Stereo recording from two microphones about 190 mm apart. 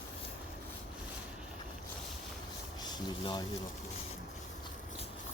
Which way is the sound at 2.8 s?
20° left (ahead or behind).